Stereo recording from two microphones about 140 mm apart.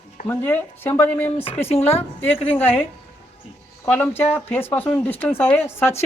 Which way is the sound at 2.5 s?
15° left (ahead or behind).